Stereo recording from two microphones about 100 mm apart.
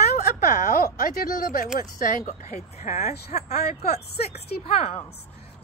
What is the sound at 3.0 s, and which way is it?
Speech, 90° left.